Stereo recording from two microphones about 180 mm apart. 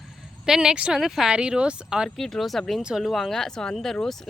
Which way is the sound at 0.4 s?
5° right (ahead or behind).